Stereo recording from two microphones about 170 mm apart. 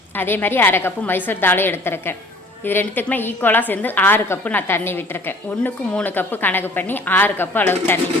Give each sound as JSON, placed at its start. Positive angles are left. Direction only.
{"t": 0.2, "sound": "a woman's voice", "side_deg": 10}